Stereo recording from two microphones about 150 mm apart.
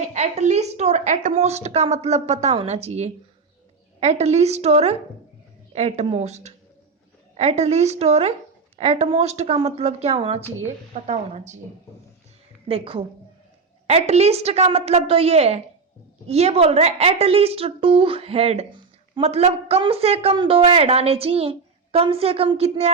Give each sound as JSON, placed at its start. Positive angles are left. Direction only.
{"t": 0.0, "sound": "a woman's voice", "side_deg": -50}
{"t": 12.6, "sound": "a woman's voice", "side_deg": -40}